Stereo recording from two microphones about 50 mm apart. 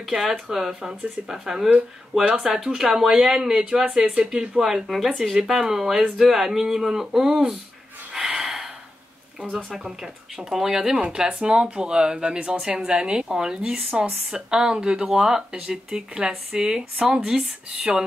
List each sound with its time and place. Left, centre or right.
0.0 s speech: centre
8.1 s snort: centre
9.8 s speech: centre